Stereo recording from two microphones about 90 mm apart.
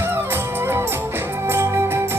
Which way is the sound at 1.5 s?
25° right (ahead or behind).